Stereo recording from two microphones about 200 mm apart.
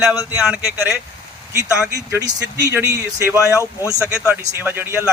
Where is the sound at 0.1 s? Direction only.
5° right (ahead or behind).